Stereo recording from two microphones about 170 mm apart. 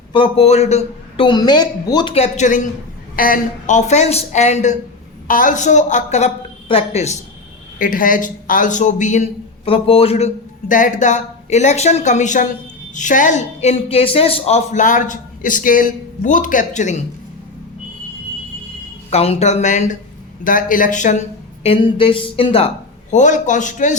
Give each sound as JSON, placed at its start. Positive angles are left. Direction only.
{"t": 0.1, "sound": "a man's voice", "side_deg": 35}
{"t": 2.1, "sound": "a man's voice", "side_deg": 40}
{"t": 7.8, "sound": "a man's voice", "side_deg": 55}
{"t": 19.1, "sound": "a woman's voice", "side_deg": 40}
{"t": 21.6, "sound": "a woman's voice", "side_deg": 30}
{"t": 23.1, "sound": "a man's voice", "side_deg": 45}